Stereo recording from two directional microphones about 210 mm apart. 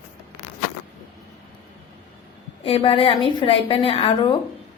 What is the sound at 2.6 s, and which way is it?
A woman's voice, 25° left (ahead or behind).